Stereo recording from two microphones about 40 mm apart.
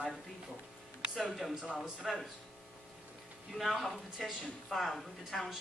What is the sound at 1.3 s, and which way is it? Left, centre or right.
Speech, centre.